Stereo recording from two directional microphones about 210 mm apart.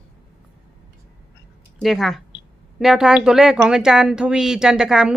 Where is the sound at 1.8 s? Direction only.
Centre (ahead or behind).